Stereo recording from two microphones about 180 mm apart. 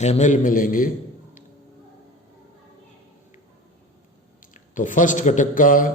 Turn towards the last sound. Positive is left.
turn(degrees=50)  # may be behind; listen again after turning